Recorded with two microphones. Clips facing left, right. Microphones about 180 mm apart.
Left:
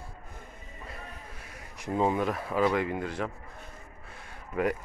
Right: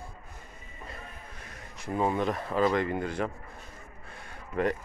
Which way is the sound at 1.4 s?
10° left (ahead or behind).